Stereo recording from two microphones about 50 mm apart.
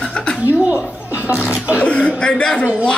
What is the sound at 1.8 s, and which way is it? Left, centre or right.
Speech, left.